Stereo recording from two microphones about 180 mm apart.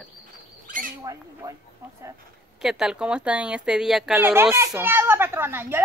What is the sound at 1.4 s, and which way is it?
Speech, 20° right (ahead or behind).